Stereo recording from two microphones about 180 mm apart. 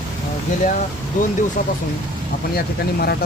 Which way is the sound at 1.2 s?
45° left (ahead or behind).